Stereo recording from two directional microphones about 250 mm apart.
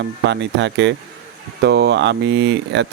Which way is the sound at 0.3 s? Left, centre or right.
Right.